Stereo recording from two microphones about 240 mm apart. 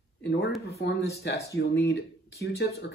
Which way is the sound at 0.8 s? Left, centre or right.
Left.